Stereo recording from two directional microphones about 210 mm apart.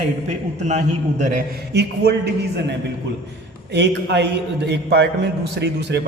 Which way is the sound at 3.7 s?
55° right (ahead or behind).